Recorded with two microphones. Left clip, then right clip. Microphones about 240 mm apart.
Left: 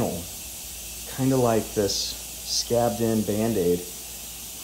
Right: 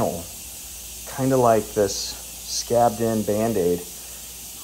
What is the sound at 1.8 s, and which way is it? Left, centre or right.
Speech, right.